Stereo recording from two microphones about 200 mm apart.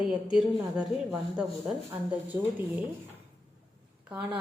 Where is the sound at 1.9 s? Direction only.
10° right (ahead or behind).